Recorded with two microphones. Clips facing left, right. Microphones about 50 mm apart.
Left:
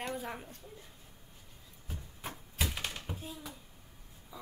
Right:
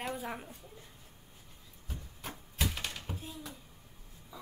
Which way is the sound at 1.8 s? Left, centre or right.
Centre.